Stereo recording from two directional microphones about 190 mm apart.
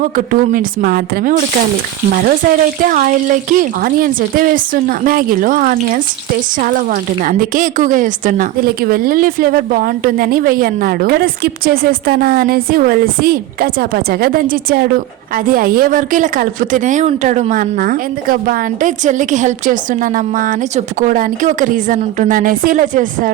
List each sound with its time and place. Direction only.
0.0 s speech: 45° right (ahead or behind)